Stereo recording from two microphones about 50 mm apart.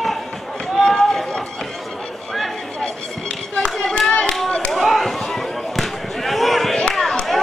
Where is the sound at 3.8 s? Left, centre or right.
Centre.